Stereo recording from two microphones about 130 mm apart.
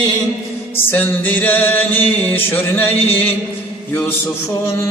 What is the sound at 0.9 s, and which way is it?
Music, 15° left (ahead or behind).